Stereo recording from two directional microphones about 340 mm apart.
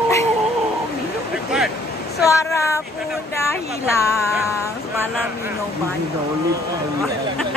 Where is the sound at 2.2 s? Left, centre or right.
Centre.